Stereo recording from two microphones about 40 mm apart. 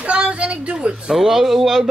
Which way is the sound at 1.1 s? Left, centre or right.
Centre.